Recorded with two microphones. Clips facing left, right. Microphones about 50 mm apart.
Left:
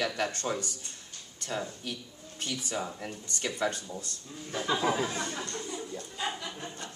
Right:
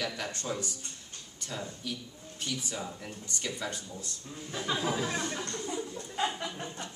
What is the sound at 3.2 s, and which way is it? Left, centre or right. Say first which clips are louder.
Speech: left 5 dB; left.